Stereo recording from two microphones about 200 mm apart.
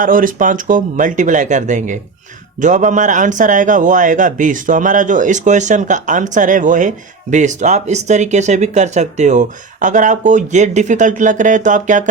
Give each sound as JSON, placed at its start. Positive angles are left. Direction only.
{"t": 0.0, "sound": "a man's voice", "side_deg": -45}